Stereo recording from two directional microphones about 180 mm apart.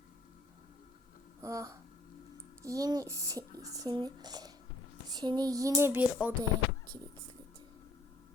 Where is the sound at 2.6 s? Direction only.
20° right (ahead or behind).